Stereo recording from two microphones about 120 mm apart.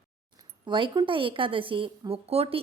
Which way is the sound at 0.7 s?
45° right (ahead or behind).